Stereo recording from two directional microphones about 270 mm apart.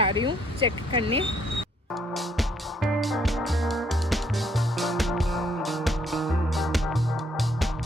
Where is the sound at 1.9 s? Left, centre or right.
Centre.